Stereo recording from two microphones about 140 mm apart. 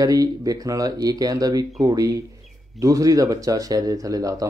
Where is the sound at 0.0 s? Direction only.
25° right (ahead or behind).